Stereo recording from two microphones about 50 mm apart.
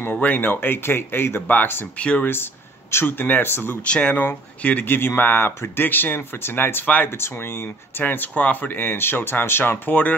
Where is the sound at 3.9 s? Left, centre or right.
Left.